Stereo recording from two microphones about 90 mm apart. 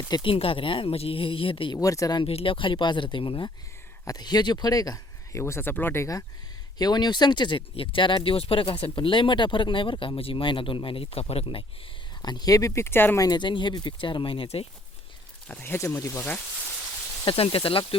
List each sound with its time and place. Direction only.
0.1 s speech: 75° left (ahead or behind)
1.7 s speech: 40° left (ahead or behind)
2.2 s speech: 90° left; by 3.4 s 70° left (ahead or behind)
4.0 s speech: 45° left (ahead or behind)
5.4 s speech: 25° left (ahead or behind)
6.7 s speech: 50° left (ahead or behind); by 11.6 s 90° left
12.2 s speech: 50° left (ahead or behind); by 13.1 s 25° left (ahead or behind)
13.1 s speech: 45° left (ahead or behind)
13.4 s speech: 60° left (ahead or behind); by 14.7 s 85° left
15.4 s speech: 20° left (ahead or behind)
17.2 s speech: 90° left